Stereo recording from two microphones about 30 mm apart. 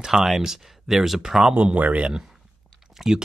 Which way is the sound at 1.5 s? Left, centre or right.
Right.